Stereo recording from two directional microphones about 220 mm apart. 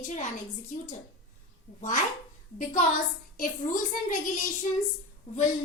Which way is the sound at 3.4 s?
35° left (ahead or behind).